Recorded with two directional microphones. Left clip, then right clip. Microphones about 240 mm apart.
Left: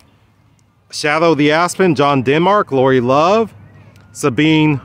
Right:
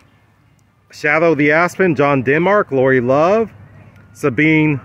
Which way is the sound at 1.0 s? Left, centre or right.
Left.